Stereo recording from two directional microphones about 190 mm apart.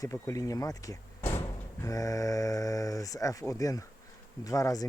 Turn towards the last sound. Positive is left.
turn(degrees=20)  # may be behind; listen again after turning